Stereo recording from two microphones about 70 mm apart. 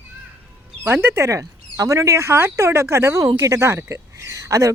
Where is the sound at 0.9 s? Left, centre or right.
Right.